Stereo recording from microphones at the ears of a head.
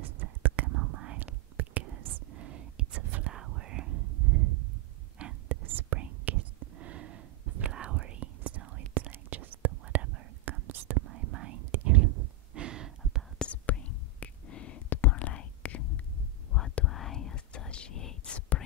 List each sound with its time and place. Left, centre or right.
0.0 s whispering: right
13.5 s whispering: left